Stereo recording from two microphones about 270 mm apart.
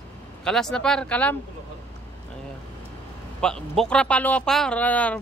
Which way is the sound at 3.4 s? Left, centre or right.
Centre.